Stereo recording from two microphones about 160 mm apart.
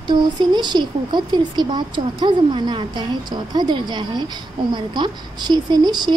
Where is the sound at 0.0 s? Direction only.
25° right (ahead or behind).